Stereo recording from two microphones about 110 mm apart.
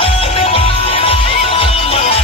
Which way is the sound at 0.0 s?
60° left (ahead or behind).